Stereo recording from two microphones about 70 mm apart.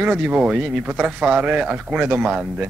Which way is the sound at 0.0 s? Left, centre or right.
Centre.